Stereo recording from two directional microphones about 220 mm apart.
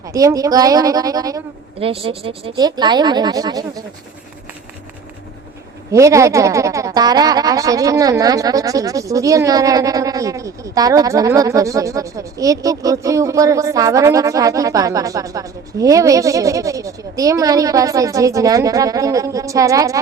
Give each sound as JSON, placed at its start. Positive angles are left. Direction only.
{"t": 0.1, "sound": "a woman's voice", "side_deg": -15}
{"t": 5.9, "sound": "a woman's voice", "side_deg": -15}